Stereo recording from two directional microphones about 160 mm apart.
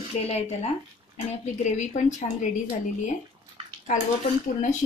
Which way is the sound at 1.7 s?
50° left (ahead or behind).